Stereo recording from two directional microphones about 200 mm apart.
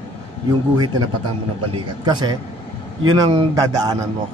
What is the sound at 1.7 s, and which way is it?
Speech, 20° right (ahead or behind).